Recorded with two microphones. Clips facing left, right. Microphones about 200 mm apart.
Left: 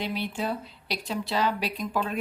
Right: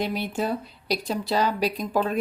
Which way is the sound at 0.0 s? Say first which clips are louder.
Right 4 dB; 45° right (ahead or behind).